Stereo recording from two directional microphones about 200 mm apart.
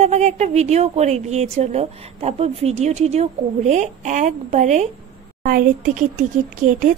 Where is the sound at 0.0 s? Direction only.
35° right (ahead or behind).